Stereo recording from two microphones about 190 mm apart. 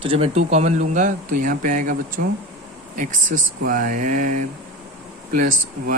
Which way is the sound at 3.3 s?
45° right (ahead or behind).